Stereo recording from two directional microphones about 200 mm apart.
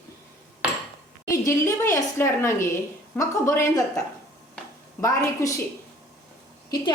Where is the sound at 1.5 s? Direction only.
15° left (ahead or behind).